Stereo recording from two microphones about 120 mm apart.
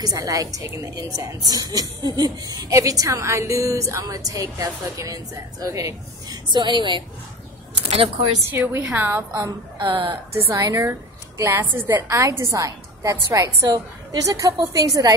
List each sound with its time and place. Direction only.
0.0 s a woman's voice: 30° right (ahead or behind)
8.5 s a woman's voice: 15° right (ahead or behind)
9.8 s speech: 40° right (ahead or behind)
10.6 s a woman's voice: 30° right (ahead or behind)